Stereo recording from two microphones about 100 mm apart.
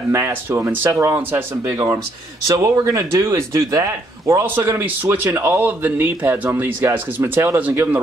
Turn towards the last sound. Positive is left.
turn(degrees=-20)  # may be behind; listen again after turning